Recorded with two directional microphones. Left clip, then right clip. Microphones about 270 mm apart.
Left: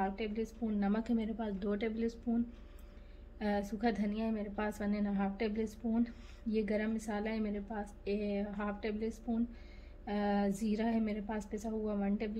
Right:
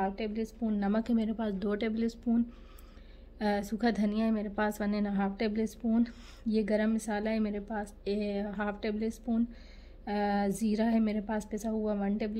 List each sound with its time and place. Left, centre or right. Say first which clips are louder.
0.0 s a woman's voice: right 3 dB; right
3.3 s a woman's voice: right 5 dB; right